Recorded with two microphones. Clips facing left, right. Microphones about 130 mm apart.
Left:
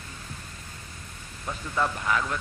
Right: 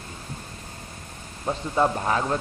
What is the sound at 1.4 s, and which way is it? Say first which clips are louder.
Speech: right 6 dB; 35° right (ahead or behind).